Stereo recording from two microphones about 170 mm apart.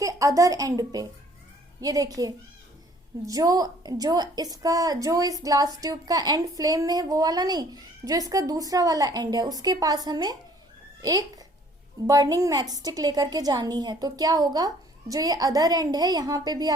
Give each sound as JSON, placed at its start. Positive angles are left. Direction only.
{"t": 0.0, "sound": "a woman's voice", "side_deg": -20}